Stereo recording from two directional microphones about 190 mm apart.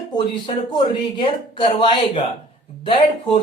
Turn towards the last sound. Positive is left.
turn(degrees=25)  # may be behind; listen again after turning